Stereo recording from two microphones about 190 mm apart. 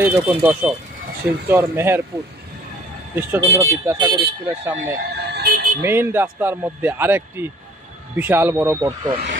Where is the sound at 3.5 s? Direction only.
15° right (ahead or behind).